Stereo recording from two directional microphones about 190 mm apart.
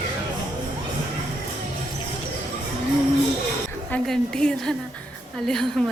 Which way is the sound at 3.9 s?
5° left (ahead or behind).